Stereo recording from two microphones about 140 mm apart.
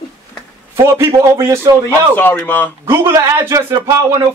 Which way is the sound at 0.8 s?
20° right (ahead or behind).